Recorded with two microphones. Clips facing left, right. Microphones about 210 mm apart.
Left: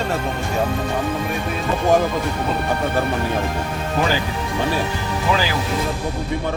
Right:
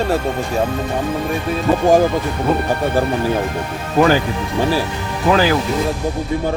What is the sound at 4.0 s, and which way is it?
Speech, 45° right (ahead or behind).